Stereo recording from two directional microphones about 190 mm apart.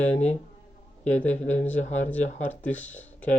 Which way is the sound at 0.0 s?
35° left (ahead or behind).